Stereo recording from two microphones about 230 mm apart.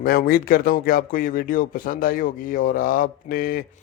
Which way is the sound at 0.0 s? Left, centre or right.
Left.